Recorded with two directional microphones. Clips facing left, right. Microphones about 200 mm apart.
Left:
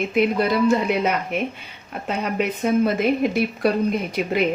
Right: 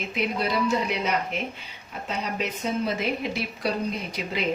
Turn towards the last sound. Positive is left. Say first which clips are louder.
# left 8 dB
turn(degrees=55)  # may be behind; listen again after turning